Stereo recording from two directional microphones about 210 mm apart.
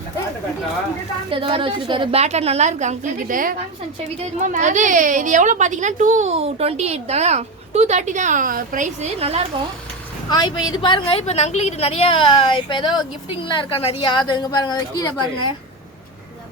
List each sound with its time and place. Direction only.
1.3 s a woman's voice: 25° right (ahead or behind)
10.2 s a woman's voice: 20° left (ahead or behind)